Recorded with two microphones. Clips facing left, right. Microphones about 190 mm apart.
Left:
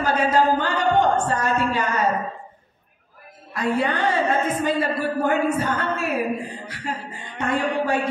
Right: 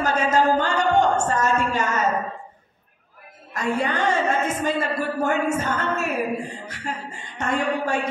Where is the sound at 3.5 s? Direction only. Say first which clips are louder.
Left 1 dB; 45° right (ahead or behind).